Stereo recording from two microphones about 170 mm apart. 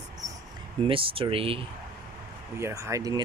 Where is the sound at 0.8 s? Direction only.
30° right (ahead or behind).